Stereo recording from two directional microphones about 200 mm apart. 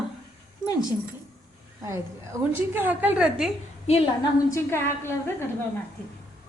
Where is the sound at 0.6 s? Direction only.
20° left (ahead or behind).